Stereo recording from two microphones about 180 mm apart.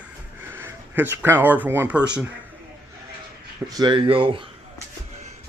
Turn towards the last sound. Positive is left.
turn(degrees=-30)  # may be behind; listen again after turning